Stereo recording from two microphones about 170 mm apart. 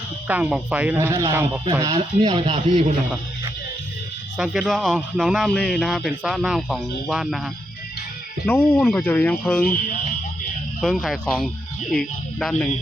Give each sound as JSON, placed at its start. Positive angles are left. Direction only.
{"t": 0.3, "sound": "speech", "side_deg": -10}
{"t": 2.0, "sound": "speech", "side_deg": -35}
{"t": 4.4, "sound": "a man's voice", "side_deg": -5}
{"t": 8.4, "sound": "speech", "side_deg": 10}
{"t": 10.8, "sound": "a man's voice", "side_deg": 0}